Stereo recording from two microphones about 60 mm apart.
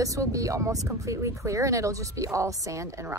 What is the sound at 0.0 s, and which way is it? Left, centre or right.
Speech, right.